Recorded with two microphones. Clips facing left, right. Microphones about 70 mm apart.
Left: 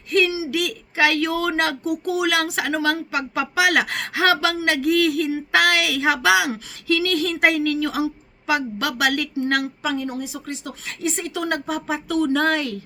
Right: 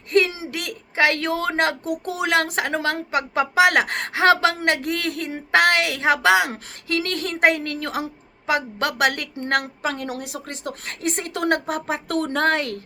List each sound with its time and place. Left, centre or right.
0.1 s a woman's voice: right
9.9 s a woman's voice: right